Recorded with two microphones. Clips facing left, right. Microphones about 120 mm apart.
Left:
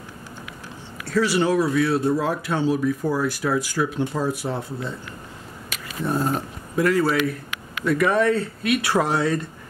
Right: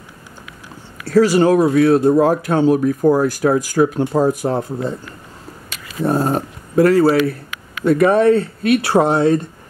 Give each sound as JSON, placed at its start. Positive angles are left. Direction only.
{"t": 1.0, "sound": "speech", "side_deg": -40}
{"t": 6.0, "sound": "speech", "side_deg": -40}